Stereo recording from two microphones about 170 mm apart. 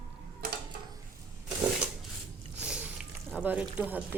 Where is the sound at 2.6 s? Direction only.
5° right (ahead or behind).